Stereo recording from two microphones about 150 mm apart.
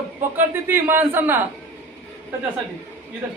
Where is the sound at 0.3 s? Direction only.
15° right (ahead or behind).